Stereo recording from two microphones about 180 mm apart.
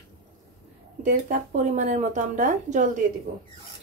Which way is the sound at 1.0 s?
45° right (ahead or behind).